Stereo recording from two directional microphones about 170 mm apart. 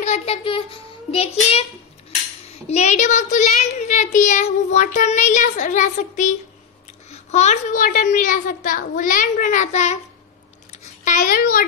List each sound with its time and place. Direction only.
0.0 s a child's voice: 40° left (ahead or behind)
2.7 s speech: 40° left (ahead or behind)
11.1 s a child's voice: 60° left (ahead or behind)